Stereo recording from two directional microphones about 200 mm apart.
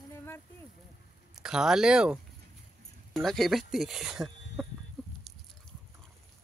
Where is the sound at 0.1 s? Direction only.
10° left (ahead or behind).